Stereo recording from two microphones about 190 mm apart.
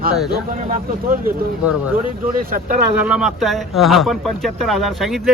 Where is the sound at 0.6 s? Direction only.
45° right (ahead or behind).